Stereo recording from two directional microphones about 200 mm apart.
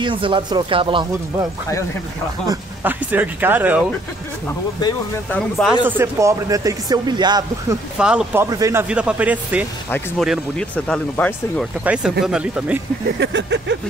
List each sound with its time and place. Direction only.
0.0 s speech: 25° right (ahead or behind)
2.4 s speech: 15° right (ahead or behind)
5.3 s speech: centre (ahead or behind)
5.9 s speech: 15° right (ahead or behind)
8.0 s speech: 5° right (ahead or behind)
8.5 s speech: 15° right (ahead or behind)
8.8 s speech: 5° right (ahead or behind)
9.8 s speech: 10° left (ahead or behind)
11.8 s speech: 5° right (ahead or behind)
13.2 s a sound: 60° right (ahead or behind)